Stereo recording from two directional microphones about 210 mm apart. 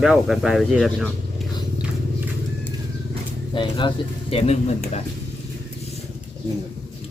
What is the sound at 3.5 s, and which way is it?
Speech, 25° left (ahead or behind).